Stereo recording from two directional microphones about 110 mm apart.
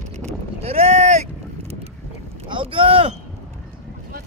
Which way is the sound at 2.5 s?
50° right (ahead or behind).